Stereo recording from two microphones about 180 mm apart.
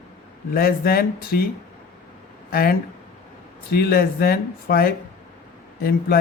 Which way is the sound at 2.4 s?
55° left (ahead or behind).